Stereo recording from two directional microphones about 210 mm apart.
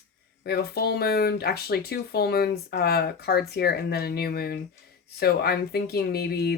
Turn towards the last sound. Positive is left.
turn(degrees=50)  # may be behind; listen again after turning